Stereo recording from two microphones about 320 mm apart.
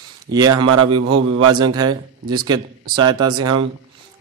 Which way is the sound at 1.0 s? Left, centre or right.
Right.